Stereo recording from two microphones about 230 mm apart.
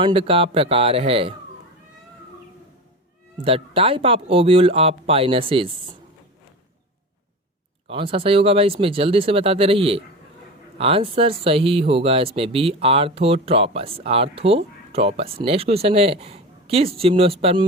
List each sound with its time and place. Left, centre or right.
0.0 s speech: right
3.4 s speech: right
7.9 s speech: right